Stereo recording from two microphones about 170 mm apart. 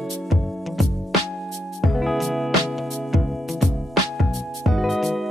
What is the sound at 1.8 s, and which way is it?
Music, centre (ahead or behind).